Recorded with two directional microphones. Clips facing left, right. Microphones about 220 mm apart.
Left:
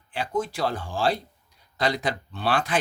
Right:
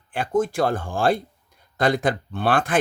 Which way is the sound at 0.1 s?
50° right (ahead or behind).